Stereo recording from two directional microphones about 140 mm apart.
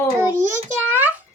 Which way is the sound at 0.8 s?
10° right (ahead or behind).